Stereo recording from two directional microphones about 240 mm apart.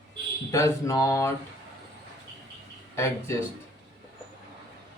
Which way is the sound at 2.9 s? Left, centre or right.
Centre.